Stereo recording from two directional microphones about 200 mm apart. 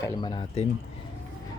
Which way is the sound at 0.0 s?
20° left (ahead or behind).